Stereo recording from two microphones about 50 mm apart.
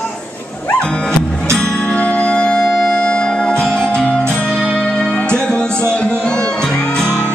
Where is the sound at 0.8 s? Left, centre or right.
Centre.